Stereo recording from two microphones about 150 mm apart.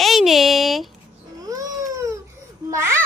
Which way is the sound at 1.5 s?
20° right (ahead or behind).